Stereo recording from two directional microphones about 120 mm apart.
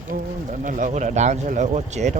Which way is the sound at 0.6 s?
90° right.